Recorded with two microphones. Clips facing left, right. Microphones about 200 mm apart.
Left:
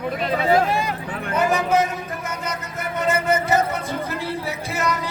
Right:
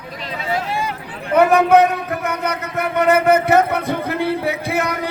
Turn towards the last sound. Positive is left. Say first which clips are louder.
# right 4 dB
turn(degrees=-60)  # may be behind; listen again after turning